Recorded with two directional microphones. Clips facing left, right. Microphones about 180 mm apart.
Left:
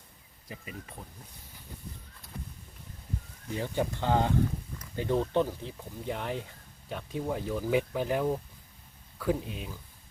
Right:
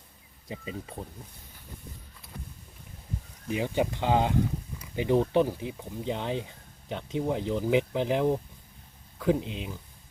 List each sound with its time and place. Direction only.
0.4 s speech: 25° right (ahead or behind)
3.5 s speech: 15° right (ahead or behind)